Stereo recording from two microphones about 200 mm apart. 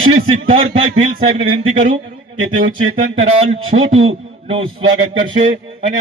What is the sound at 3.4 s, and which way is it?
A man's voice, 30° right (ahead or behind).